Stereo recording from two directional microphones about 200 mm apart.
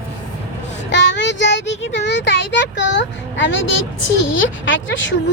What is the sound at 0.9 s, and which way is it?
Speech, 65° left (ahead or behind).